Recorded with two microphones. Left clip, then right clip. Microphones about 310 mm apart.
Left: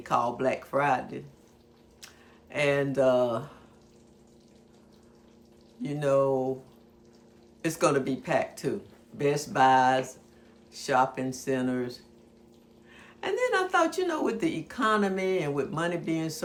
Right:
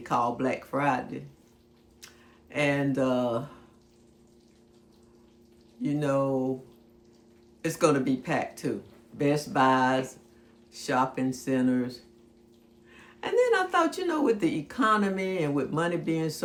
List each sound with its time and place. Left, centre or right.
0.0 s a woman's voice: centre
2.5 s a woman's voice: centre
5.8 s a woman's voice: centre
7.6 s a woman's voice: centre